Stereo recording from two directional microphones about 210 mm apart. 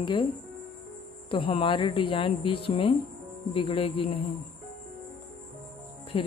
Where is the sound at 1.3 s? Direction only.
25° left (ahead or behind).